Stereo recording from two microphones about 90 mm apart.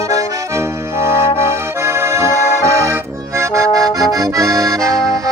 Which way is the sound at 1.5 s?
30° right (ahead or behind).